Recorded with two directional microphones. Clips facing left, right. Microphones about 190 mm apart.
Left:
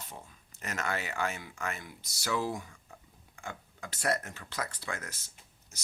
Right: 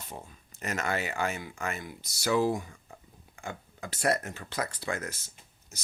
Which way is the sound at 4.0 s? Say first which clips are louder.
Right 4 dB; 25° right (ahead or behind).